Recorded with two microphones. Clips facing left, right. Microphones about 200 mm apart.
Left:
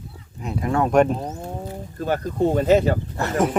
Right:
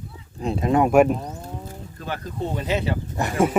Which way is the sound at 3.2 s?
15° right (ahead or behind).